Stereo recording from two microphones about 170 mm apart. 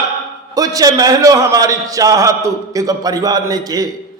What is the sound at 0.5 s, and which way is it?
A man's voice, 20° right (ahead or behind).